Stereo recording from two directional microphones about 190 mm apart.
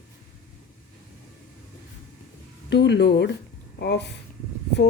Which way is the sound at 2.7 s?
65° left (ahead or behind).